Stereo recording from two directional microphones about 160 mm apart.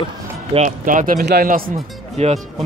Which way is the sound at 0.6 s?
55° right (ahead or behind).